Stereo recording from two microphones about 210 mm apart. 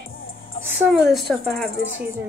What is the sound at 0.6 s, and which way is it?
A woman's voice, 5° right (ahead or behind).